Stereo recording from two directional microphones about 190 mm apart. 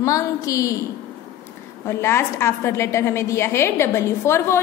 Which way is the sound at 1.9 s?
15° left (ahead or behind).